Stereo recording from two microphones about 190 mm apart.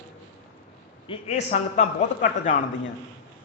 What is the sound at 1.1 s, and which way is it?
A man's voice, 35° left (ahead or behind).